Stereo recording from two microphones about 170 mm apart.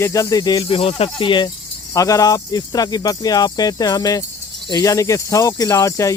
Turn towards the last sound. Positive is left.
turn(degrees=20)  # may be behind; listen again after turning